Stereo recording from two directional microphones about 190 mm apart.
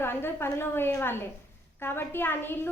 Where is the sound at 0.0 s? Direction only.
10° left (ahead or behind).